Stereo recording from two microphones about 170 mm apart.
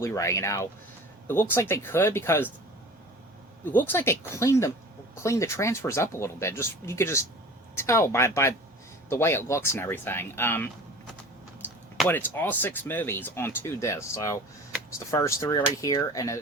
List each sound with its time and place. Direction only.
0.0 s speech: 15° left (ahead or behind)
3.7 s speech: 10° left (ahead or behind)